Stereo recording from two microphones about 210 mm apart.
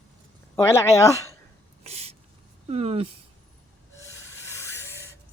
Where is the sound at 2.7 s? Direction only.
30° right (ahead or behind).